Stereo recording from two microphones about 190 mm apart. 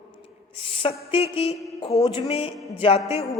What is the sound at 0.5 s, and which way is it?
A woman's voice, 30° left (ahead or behind).